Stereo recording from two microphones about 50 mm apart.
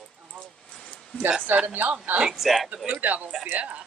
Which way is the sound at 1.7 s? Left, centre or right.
Right.